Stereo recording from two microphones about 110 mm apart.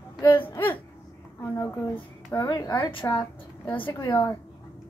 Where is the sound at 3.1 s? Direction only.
15° left (ahead or behind).